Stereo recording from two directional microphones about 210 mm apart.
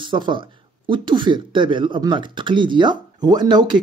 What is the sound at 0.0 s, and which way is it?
Speech, 20° right (ahead or behind).